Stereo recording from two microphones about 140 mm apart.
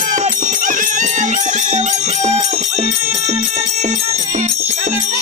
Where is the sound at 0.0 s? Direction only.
65° right (ahead or behind).